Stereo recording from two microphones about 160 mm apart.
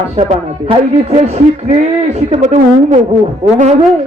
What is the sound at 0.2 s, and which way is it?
Music, 35° right (ahead or behind).